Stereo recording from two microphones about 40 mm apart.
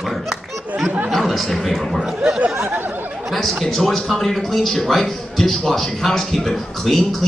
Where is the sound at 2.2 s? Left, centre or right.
Right.